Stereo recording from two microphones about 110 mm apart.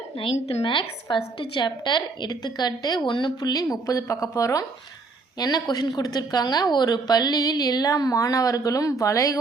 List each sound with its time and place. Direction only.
0.3 s a woman's voice: 80° left
0.6 s a woman's voice: 50° left (ahead or behind); by 9.4 s 30° left (ahead or behind)